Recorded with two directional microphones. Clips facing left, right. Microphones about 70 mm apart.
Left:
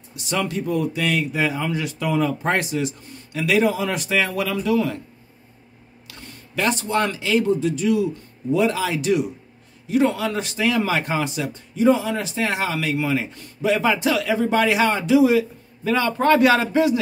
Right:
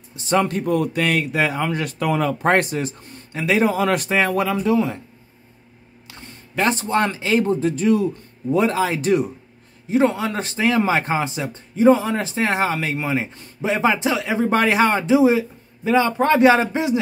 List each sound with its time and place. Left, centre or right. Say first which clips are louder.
0.1 s a man's voice: right 5 dB; right
3.7 s a man's voice: right 5 dB; right
4.4 s speech: right 2 dB; right
6.0 s speech: even; right
9.8 s speech: right 1 dB; right
14.5 s speech: right 3 dB; right